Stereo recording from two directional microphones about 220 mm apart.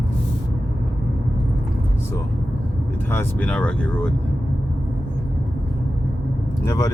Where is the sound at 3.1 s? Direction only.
10° left (ahead or behind).